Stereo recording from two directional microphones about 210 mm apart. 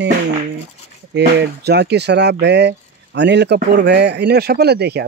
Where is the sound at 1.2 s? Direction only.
50° right (ahead or behind).